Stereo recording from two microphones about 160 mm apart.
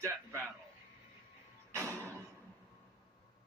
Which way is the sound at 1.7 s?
15° right (ahead or behind).